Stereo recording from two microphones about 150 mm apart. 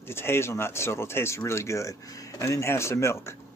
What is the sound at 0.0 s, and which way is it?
Speech, 15° left (ahead or behind).